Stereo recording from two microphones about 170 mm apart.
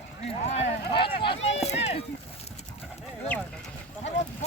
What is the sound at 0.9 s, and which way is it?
Speech, 30° left (ahead or behind).